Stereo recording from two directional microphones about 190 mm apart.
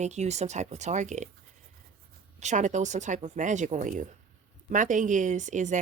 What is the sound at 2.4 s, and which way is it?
Speech, 40° right (ahead or behind).